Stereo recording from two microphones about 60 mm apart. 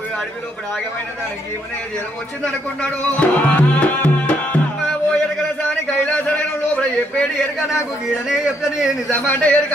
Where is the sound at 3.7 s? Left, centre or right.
Left.